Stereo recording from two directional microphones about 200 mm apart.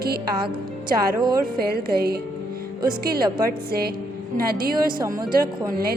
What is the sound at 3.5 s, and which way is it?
Speech, 50° right (ahead or behind).